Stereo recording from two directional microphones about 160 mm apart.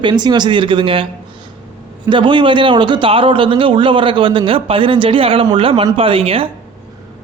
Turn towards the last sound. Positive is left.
turn(degrees=-35)  # may be behind; listen again after turning